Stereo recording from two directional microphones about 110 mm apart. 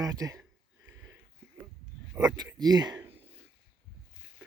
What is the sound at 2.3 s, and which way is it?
Speech, 35° right (ahead or behind).